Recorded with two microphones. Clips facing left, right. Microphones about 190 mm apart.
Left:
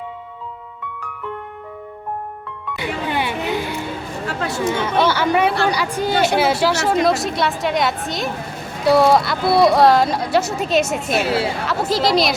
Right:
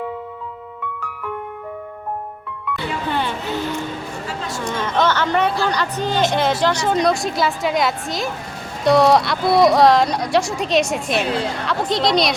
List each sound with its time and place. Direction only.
3.1 s a sound: 10° left (ahead or behind)
4.3 s speech: 65° left (ahead or behind)
4.6 s speech: 10° left (ahead or behind)